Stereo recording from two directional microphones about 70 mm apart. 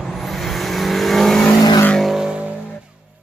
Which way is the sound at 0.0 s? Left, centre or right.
Centre.